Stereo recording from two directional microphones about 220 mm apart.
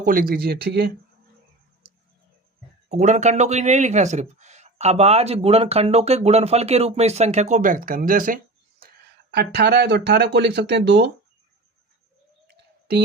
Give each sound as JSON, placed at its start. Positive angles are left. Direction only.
{"t": 0.0, "sound": "speech", "side_deg": -40}
{"t": 2.9, "sound": "speech", "side_deg": -30}